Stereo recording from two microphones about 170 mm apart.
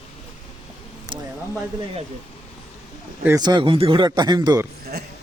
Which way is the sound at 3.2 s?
20° right (ahead or behind).